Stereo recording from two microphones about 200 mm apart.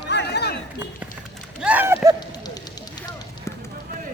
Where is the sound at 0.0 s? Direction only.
55° left (ahead or behind).